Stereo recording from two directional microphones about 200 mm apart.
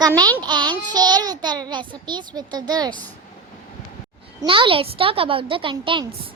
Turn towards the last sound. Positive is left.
turn(degrees=-25)  # may be behind; listen again after turning